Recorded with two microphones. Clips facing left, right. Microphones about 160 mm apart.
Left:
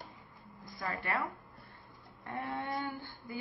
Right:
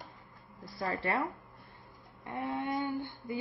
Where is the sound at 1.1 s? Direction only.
30° right (ahead or behind).